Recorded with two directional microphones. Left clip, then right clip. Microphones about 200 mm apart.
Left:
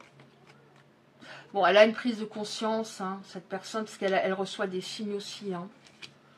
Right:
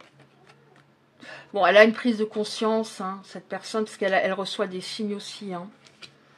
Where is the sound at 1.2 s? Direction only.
35° right (ahead or behind).